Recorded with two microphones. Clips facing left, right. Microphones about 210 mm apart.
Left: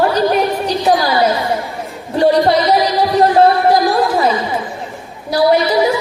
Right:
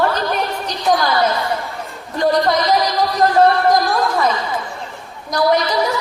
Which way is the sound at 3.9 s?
30° left (ahead or behind).